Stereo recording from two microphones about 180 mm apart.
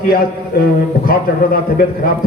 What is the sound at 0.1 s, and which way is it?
A man's voice, 55° left (ahead or behind).